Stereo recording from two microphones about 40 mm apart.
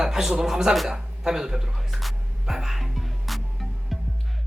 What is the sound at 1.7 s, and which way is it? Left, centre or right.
Speech, centre.